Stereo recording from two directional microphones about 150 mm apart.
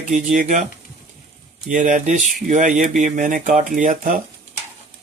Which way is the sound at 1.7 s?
60° right (ahead or behind).